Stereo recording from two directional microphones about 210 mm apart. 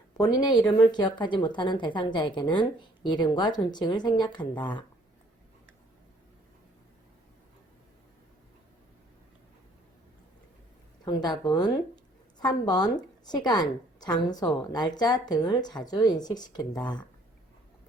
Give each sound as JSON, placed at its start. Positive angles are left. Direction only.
{"t": 0.2, "sound": "a woman's voice", "side_deg": 20}
{"t": 11.0, "sound": "a woman's voice", "side_deg": 20}